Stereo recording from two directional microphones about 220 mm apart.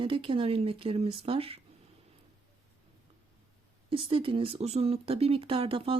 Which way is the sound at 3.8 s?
25° right (ahead or behind).